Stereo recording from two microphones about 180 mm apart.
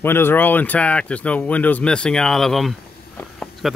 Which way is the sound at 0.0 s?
10° left (ahead or behind).